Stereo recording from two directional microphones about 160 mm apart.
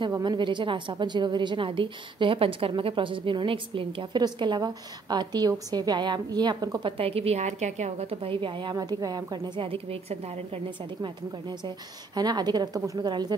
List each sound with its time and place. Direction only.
0.0 s a woman's voice: 25° right (ahead or behind)
7.0 s a woman's voice: 40° right (ahead or behind)
12.2 s a woman's voice: 25° right (ahead or behind)